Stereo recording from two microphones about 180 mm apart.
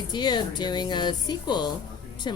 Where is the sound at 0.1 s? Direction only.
25° left (ahead or behind).